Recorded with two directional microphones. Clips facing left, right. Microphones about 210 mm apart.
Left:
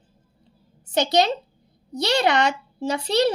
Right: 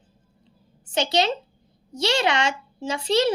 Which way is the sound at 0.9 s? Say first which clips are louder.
Left 3 dB; 40° left (ahead or behind).